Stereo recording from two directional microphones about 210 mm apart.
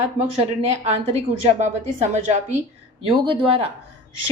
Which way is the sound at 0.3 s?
30° right (ahead or behind).